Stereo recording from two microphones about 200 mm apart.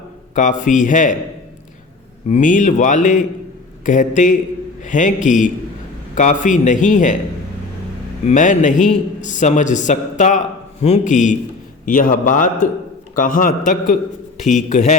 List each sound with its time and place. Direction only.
0.3 s speech: 40° left (ahead or behind)
2.3 s speech: 40° left (ahead or behind)
8.3 s a man's voice: 40° left (ahead or behind)